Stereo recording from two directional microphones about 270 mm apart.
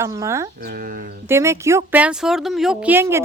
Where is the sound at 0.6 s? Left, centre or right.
Right.